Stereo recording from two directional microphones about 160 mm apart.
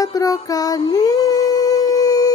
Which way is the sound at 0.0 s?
20° left (ahead or behind).